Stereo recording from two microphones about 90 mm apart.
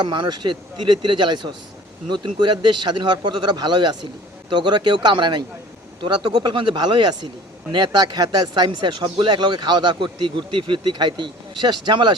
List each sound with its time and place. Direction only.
0.0 s speech: 55° right (ahead or behind)
6.7 s speech: 55° right (ahead or behind)